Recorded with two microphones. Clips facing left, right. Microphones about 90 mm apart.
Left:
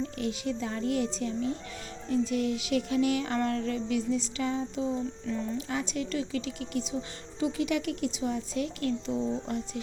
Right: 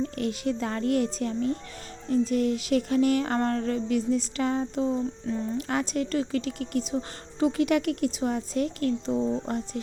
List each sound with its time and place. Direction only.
0.0 s a woman's voice: 50° right (ahead or behind)